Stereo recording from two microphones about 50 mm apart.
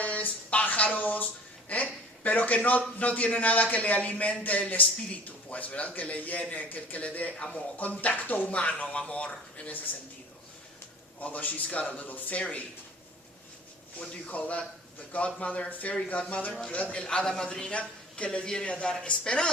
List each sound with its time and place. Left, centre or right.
0.0 s a sound: left
3.0 s a man's voice: left
7.8 s a man's voice: left
11.2 s a man's voice: left
14.1 s a man's voice: left